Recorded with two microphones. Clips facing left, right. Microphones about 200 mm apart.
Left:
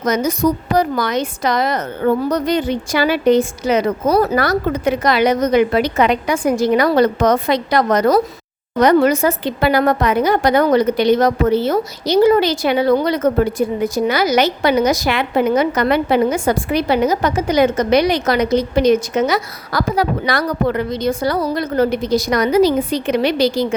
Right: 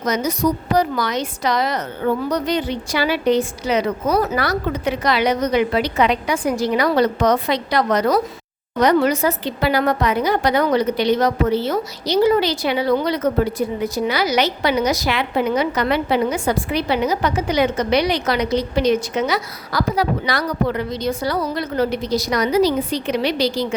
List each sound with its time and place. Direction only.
0.0 s a woman's voice: 50° left (ahead or behind)